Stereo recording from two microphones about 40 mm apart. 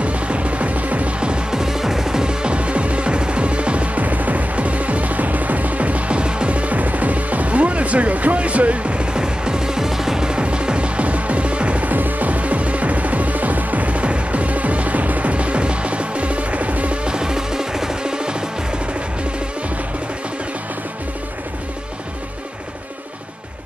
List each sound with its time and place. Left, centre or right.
0.0 s music: right
1.2 s music: right
1.6 s music: centre; by 11.9 s right
11.9 s music: right
17.0 s music: centre